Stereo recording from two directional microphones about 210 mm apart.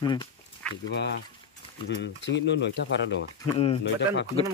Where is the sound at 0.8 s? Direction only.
55° left (ahead or behind).